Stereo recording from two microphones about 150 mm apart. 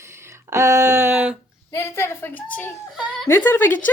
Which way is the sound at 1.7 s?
15° left (ahead or behind).